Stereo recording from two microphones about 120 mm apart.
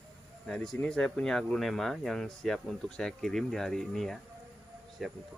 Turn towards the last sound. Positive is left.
turn(degrees=0)  # may be behind; listen again after turning